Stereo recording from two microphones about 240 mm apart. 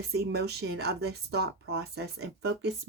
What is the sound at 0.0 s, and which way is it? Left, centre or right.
Speech, right.